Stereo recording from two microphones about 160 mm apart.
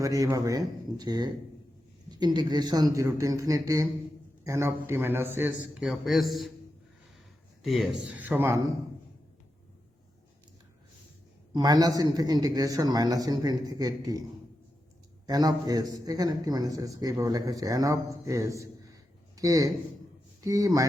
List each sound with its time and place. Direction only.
0.0 s a man's voice: 20° right (ahead or behind); by 6.5 s centre (ahead or behind)
7.6 s a man's voice: centre (ahead or behind)
11.5 s speech: 25° right (ahead or behind)
15.3 s speech: 25° right (ahead or behind)